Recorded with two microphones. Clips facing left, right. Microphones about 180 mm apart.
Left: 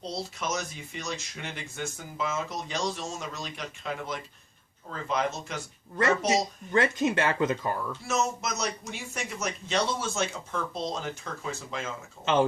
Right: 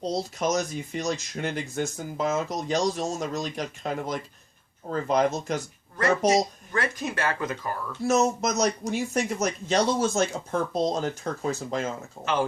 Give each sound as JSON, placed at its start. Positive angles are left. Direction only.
{"t": 0.0, "sound": "speech", "side_deg": -40}
{"t": 6.3, "sound": "speech", "side_deg": 25}
{"t": 8.0, "sound": "speech", "side_deg": -40}
{"t": 12.2, "sound": "speech", "side_deg": 25}